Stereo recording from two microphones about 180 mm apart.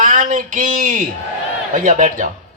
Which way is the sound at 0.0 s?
45° right (ahead or behind).